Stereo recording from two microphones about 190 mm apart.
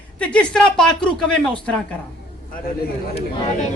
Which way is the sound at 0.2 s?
5° left (ahead or behind).